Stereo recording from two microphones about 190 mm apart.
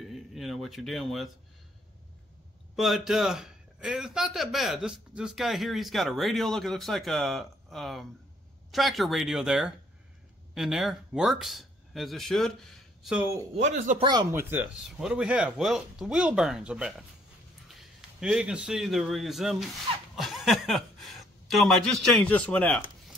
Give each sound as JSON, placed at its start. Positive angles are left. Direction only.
{"t": 0.0, "sound": "speech", "side_deg": 0}
{"t": 2.7, "sound": "speech", "side_deg": 0}
{"t": 13.6, "sound": "speech", "side_deg": -35}
{"t": 14.0, "sound": "speech", "side_deg": -20}
{"t": 14.4, "sound": "a man's voice", "side_deg": -10}